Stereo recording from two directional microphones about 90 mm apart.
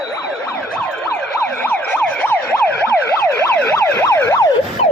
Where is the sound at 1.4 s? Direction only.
20° left (ahead or behind).